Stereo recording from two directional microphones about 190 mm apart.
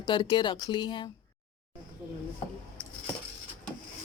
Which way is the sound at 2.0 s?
5° right (ahead or behind).